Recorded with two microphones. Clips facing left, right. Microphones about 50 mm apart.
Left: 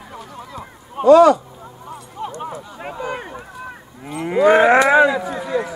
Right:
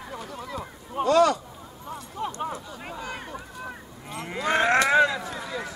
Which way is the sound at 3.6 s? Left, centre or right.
Centre.